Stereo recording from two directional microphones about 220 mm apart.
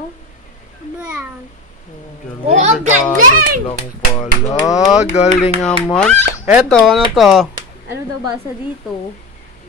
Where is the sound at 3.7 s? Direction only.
20° left (ahead or behind).